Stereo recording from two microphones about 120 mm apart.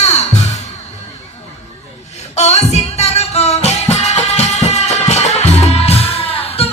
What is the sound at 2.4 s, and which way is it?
Music, 65° left (ahead or behind).